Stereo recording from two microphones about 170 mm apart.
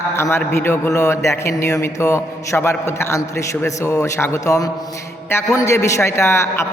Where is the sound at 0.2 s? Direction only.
15° left (ahead or behind).